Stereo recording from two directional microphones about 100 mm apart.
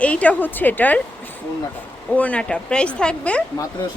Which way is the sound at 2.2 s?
15° left (ahead or behind).